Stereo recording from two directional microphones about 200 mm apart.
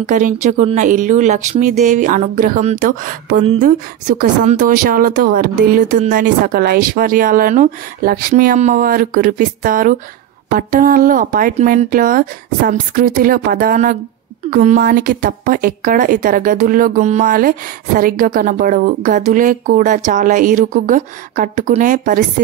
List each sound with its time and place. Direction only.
0.0 s a woman's voice: 40° right (ahead or behind)